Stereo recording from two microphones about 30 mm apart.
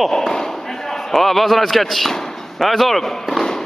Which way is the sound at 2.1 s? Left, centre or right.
Centre.